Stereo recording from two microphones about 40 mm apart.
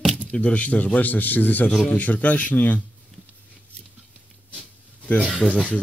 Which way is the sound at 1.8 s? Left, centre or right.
Left.